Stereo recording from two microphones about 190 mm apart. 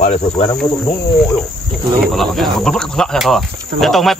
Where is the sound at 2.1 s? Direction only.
Centre (ahead or behind).